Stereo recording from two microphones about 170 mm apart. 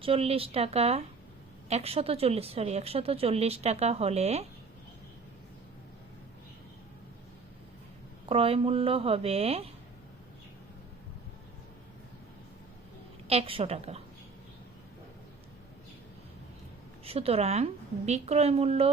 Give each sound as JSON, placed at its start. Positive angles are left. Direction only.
{"t": 0.0, "sound": "a woman's voice", "side_deg": -35}
{"t": 8.3, "sound": "a woman's voice", "side_deg": -35}
{"t": 13.2, "sound": "a woman's voice", "side_deg": -35}
{"t": 17.0, "sound": "a woman's voice", "side_deg": -35}